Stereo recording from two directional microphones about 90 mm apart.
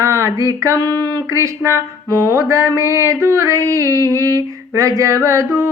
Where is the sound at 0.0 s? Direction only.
35° right (ahead or behind).